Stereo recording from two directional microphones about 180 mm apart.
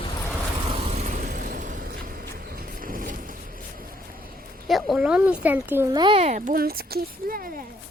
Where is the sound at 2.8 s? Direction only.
50° right (ahead or behind).